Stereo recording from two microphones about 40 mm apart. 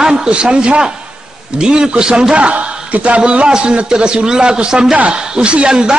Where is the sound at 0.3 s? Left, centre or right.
Right.